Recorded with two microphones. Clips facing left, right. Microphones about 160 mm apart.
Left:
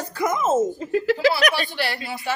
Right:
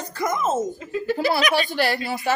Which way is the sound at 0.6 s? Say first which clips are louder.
Left 4 dB; 30° left (ahead or behind).